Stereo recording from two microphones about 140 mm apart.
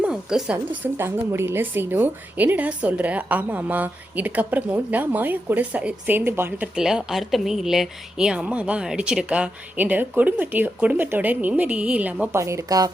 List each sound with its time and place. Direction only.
0.0 s a woman's voice: 5° right (ahead or behind)
12.4 s speech: 20° right (ahead or behind)